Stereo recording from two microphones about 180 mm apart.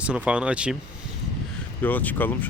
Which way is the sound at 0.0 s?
5° right (ahead or behind).